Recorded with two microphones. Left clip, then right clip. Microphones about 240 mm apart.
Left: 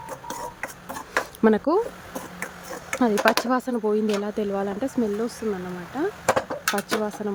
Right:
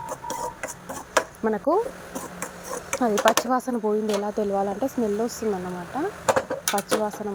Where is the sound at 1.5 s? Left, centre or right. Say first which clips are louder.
Even; centre.